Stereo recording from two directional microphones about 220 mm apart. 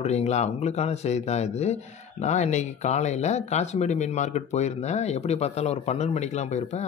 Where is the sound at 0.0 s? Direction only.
30° left (ahead or behind).